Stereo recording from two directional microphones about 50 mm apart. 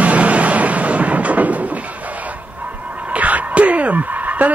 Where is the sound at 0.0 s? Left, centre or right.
Right.